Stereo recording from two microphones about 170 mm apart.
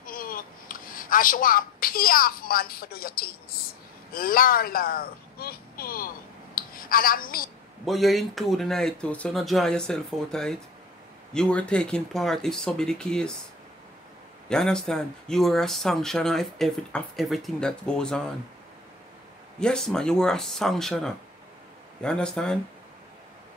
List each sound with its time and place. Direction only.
0.0 s a sound: 55° left (ahead or behind)
4.1 s speech: 55° left (ahead or behind)
6.5 s a sound: 60° left (ahead or behind)
7.8 s speech: centre (ahead or behind)
14.5 s speech: 5° left (ahead or behind)
19.6 s speech: 5° left (ahead or behind)